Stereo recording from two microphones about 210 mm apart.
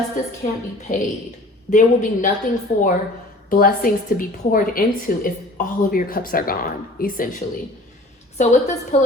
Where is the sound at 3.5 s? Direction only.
40° left (ahead or behind).